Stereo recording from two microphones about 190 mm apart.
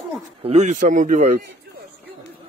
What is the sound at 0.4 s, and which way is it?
Speech, 30° right (ahead or behind).